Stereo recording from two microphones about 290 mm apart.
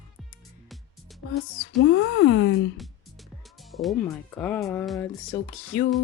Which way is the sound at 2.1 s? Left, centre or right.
Left.